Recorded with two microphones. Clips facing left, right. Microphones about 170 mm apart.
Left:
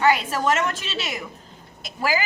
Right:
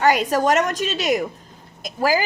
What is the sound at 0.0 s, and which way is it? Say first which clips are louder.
A woman's voice: right 3 dB; 40° right (ahead or behind).